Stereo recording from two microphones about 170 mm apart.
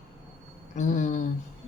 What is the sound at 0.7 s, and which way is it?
Speech, 45° left (ahead or behind).